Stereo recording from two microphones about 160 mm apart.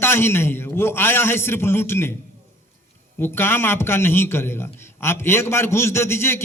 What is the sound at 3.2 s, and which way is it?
A man's voice, 15° left (ahead or behind).